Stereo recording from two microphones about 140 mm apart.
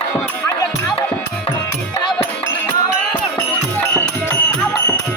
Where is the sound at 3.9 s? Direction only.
20° left (ahead or behind).